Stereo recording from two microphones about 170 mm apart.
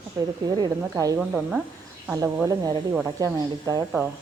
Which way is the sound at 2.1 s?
15° right (ahead or behind).